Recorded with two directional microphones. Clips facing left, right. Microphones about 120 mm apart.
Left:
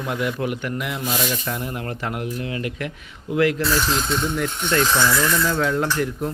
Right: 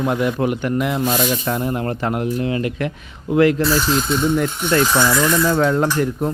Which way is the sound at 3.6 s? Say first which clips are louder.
Right 4 dB; centre (ahead or behind).